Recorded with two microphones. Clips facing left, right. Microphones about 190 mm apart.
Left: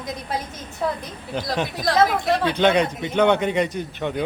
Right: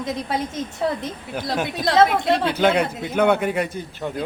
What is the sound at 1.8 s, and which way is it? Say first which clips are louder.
Speech: right 2 dB; 25° right (ahead or behind).